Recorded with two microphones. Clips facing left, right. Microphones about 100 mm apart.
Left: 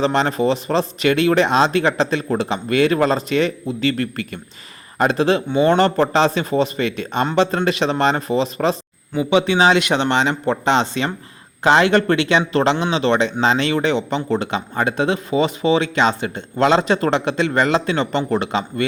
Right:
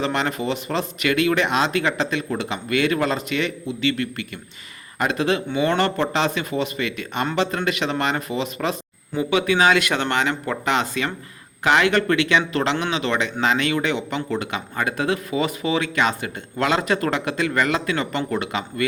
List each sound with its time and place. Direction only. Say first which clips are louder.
0.0 s speech: left 6 dB; 30° left (ahead or behind)